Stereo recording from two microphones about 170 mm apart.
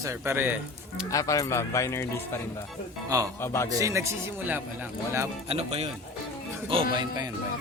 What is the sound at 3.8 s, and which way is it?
Speech, 15° right (ahead or behind).